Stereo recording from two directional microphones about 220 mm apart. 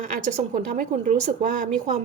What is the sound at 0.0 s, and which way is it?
A woman's voice, 35° right (ahead or behind).